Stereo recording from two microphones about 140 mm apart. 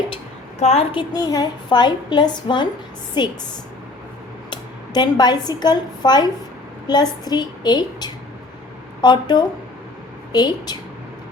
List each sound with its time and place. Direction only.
0.6 s a woman's voice: 50° left (ahead or behind)
1.1 s speech: 30° left (ahead or behind)
4.5 s a woman's voice: 30° left (ahead or behind)